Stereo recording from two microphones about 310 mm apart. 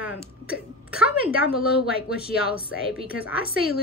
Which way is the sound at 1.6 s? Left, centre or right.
Left.